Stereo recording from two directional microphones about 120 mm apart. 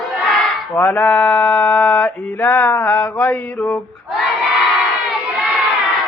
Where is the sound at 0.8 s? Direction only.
15° left (ahead or behind).